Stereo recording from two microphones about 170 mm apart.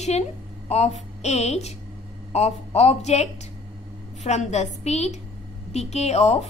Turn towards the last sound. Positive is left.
turn(degrees=40)  # may be behind; listen again after turning